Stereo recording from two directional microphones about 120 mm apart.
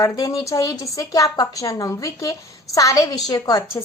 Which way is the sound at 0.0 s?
30° left (ahead or behind).